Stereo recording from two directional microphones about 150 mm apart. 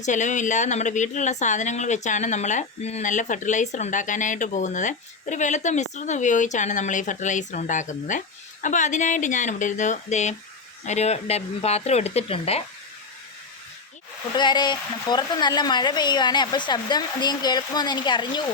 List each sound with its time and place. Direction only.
0.0 s speech: 55° left (ahead or behind)
14.3 s speech: 30° left (ahead or behind)